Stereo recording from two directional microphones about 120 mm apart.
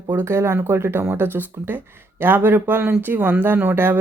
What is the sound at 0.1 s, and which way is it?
Speech, 20° right (ahead or behind).